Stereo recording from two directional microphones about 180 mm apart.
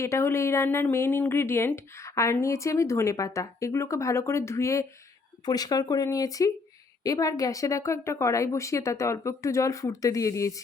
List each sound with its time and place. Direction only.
0.0 s speech: 15° left (ahead or behind)